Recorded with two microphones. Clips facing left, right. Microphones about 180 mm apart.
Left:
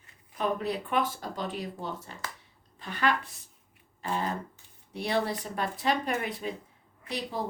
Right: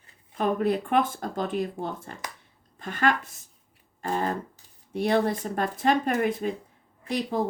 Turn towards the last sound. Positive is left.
turn(degrees=-50)  # may be behind; listen again after turning